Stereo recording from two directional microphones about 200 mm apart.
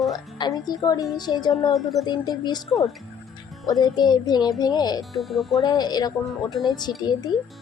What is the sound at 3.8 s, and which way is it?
A woman's voice, 20° left (ahead or behind).